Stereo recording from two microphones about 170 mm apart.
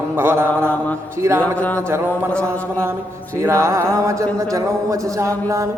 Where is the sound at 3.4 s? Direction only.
15° right (ahead or behind).